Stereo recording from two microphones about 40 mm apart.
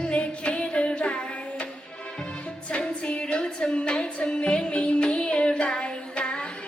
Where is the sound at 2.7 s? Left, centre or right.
Left.